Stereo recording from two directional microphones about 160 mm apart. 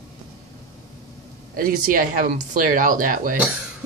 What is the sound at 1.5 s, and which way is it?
Speech, 65° right (ahead or behind).